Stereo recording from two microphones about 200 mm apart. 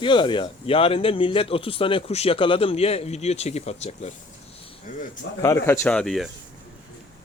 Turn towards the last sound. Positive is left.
turn(degrees=0)  # may be behind; listen again after turning